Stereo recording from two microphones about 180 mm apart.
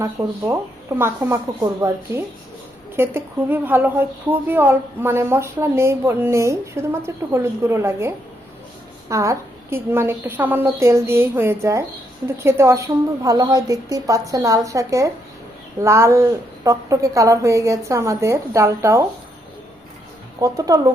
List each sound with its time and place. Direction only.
0.0 s a woman's voice: 15° right (ahead or behind)
20.4 s speech: 20° right (ahead or behind)